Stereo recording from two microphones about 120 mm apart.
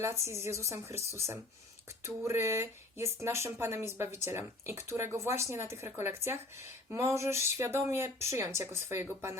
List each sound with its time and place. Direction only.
0.0 s speech: 25° right (ahead or behind)